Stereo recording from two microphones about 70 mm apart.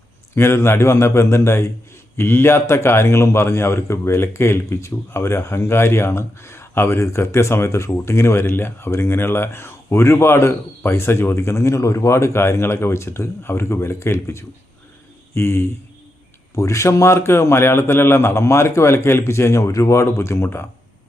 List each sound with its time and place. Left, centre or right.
0.3 s a man's voice: left